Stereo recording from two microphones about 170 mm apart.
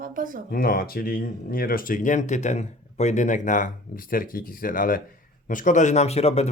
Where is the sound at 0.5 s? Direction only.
60° left (ahead or behind).